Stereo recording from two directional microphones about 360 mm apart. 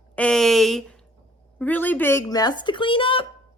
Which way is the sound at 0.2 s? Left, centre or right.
Centre.